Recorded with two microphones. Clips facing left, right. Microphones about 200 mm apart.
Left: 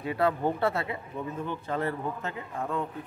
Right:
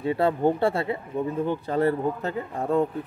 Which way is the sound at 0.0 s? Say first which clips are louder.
Right 5 dB; 30° right (ahead or behind).